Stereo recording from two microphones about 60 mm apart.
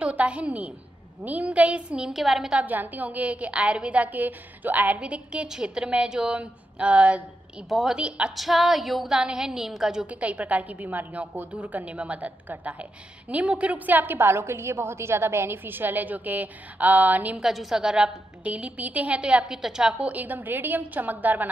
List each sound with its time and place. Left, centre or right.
0.0 s a woman's voice: right; by 2.5 s centre
2.5 s a woman's voice: right
7.7 s a woman's voice: centre
10.0 s a woman's voice: right
17.4 s a woman's voice: centre
18.4 s a woman's voice: right
20.1 s a woman's voice: right